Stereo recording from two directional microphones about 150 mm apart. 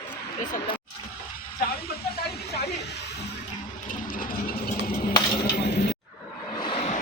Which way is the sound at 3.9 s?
65° left (ahead or behind).